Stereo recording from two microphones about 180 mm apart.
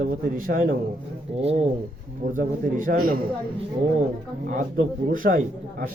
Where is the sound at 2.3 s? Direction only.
50° right (ahead or behind).